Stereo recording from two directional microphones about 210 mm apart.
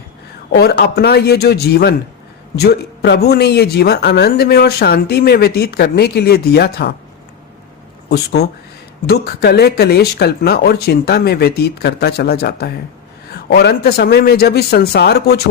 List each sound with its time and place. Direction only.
0.5 s speech: 50° left (ahead or behind)
8.1 s speech: 50° left (ahead or behind)